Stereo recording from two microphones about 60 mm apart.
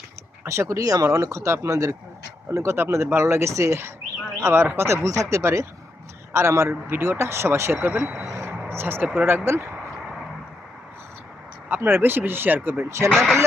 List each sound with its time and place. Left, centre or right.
0.4 s speech: right
5.0 s speech: right
7.9 s speech: right
8.4 s vehicle: right
8.7 s speech: right
11.8 s speech: right